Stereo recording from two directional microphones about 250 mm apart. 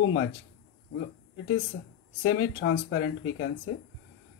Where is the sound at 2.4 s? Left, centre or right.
Left.